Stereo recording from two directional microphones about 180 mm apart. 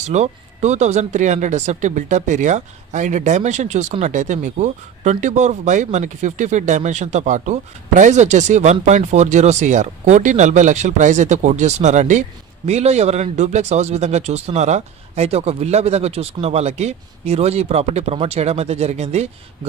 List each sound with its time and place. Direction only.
0.0 s speech: 40° right (ahead or behind)